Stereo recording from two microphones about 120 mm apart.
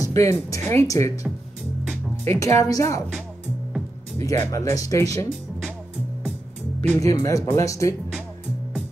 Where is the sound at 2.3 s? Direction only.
25° left (ahead or behind).